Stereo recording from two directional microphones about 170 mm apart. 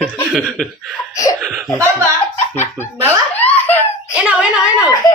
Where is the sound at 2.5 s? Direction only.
15° left (ahead or behind).